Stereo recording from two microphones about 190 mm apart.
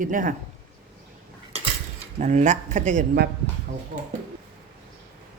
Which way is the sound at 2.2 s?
40° right (ahead or behind).